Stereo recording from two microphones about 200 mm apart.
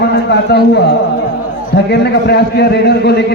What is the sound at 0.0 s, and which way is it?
A man's voice, 55° left (ahead or behind).